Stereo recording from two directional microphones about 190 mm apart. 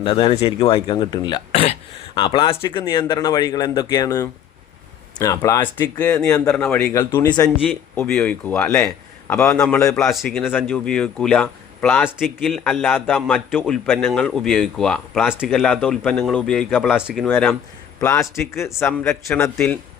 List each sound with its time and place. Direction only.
0.0 s a man's voice: 25° left (ahead or behind)
6.5 s a man's voice: 5° left (ahead or behind)
17.2 s a man's voice: 10° left (ahead or behind)